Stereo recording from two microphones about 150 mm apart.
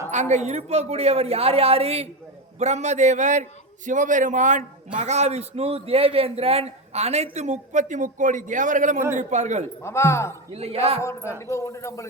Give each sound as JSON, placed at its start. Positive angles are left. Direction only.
{"t": 0.1, "sound": "a man's voice", "side_deg": -50}
{"t": 9.8, "sound": "speech", "side_deg": 20}
{"t": 10.5, "sound": "a man's voice", "side_deg": -45}
{"t": 11.3, "sound": "speech", "side_deg": 20}